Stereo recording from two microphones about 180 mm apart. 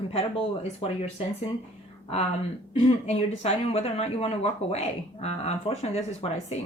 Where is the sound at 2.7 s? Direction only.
35° left (ahead or behind).